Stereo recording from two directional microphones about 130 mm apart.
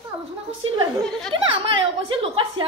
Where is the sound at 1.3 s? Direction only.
40° right (ahead or behind).